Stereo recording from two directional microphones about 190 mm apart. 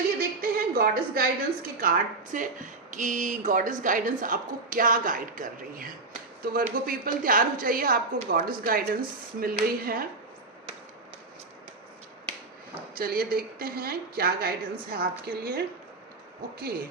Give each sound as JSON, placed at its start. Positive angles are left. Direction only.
{"t": 0.2, "sound": "a sound", "side_deg": -50}
{"t": 1.8, "sound": "speech", "side_deg": -45}
{"t": 13.0, "sound": "speech", "side_deg": -50}